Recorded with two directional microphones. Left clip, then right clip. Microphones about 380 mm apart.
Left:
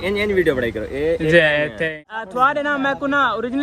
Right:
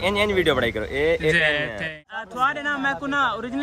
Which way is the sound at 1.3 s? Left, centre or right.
Centre.